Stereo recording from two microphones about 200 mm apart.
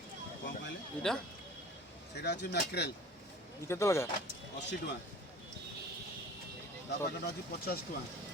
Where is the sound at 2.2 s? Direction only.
55° left (ahead or behind).